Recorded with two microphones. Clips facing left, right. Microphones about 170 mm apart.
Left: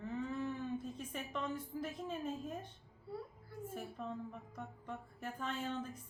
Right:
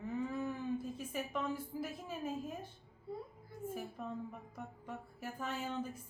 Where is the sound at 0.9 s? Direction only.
5° right (ahead or behind).